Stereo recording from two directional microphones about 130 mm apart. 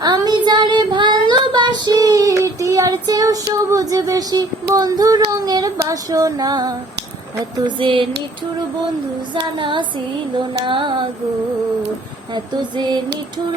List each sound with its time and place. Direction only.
0.0 s child singing: 30° right (ahead or behind)
7.5 s carnatic music: 40° right (ahead or behind)
9.3 s carnatic music: 40° right (ahead or behind)
12.3 s carnatic music: 35° right (ahead or behind)